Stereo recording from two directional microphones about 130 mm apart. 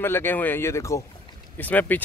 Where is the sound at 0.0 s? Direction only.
15° left (ahead or behind).